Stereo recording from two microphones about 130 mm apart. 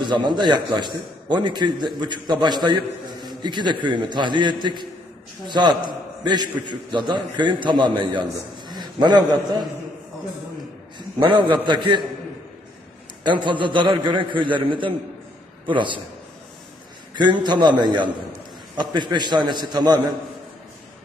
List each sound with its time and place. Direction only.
0.0 s a man's voice: 35° right (ahead or behind)
11.2 s a man's voice: 40° right (ahead or behind)
13.2 s a man's voice: 35° right (ahead or behind)
17.2 s a man's voice: 35° right (ahead or behind)